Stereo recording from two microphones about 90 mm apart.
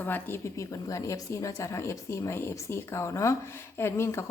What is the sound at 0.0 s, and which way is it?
A woman's voice, 25° left (ahead or behind).